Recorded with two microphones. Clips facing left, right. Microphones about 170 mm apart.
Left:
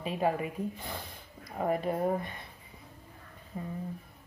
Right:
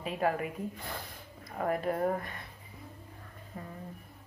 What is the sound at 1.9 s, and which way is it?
Speech, 10° left (ahead or behind).